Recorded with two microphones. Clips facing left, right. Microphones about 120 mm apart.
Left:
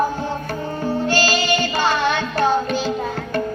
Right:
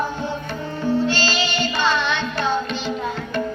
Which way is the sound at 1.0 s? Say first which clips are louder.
Left 3 dB; 45° left (ahead or behind).